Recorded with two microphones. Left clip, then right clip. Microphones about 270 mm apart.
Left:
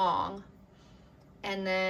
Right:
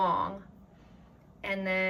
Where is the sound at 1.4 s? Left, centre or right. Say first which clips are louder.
Right 1 dB; centre.